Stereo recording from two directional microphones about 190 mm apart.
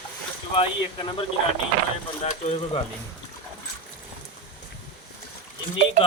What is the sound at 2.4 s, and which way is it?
Speech, 35° left (ahead or behind).